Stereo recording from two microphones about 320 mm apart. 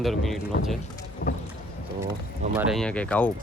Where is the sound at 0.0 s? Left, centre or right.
Centre.